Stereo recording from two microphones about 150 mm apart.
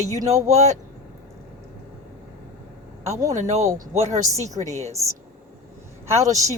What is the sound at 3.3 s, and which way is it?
Speech, 50° right (ahead or behind).